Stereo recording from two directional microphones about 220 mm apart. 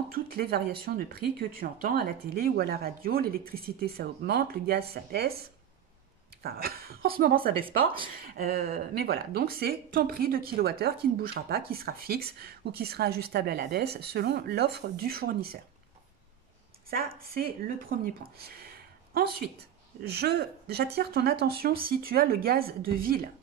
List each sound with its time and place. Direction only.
0.1 s speech: 45° right (ahead or behind)
7.4 s speech: 25° right (ahead or behind)
8.1 s speech: 40° right (ahead or behind)
17.2 s speech: 40° right (ahead or behind)
18.4 s a sound: 45° right (ahead or behind)
20.1 s speech: 45° right (ahead or behind)